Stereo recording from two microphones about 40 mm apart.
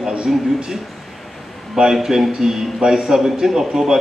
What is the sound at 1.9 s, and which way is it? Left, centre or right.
A man's voice, centre.